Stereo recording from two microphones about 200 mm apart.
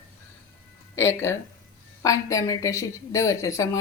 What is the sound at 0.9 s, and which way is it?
A woman's voice, 15° left (ahead or behind).